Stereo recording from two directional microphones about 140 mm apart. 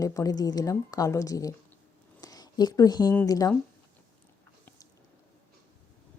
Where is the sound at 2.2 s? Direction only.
30° left (ahead or behind).